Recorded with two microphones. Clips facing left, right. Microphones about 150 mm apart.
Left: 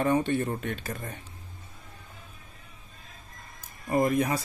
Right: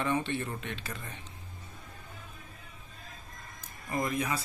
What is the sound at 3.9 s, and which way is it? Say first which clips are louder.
Speech: left 7 dB; 45° left (ahead or behind).